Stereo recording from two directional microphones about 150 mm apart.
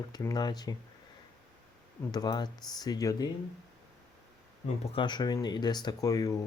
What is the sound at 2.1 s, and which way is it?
Speech, 25° left (ahead or behind).